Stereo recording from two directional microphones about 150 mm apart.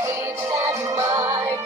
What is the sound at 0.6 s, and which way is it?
Music, 20° right (ahead or behind).